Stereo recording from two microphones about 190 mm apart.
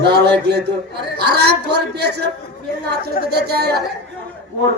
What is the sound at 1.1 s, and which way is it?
A man's voice, 60° right (ahead or behind).